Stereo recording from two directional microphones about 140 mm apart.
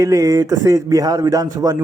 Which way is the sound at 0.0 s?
20° right (ahead or behind).